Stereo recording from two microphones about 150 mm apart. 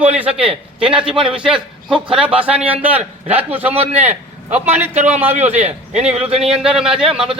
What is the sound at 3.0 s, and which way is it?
Speech, 45° right (ahead or behind).